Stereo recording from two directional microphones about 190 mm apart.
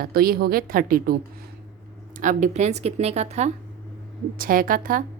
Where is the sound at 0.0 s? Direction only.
50° right (ahead or behind); by 3.5 s 35° right (ahead or behind).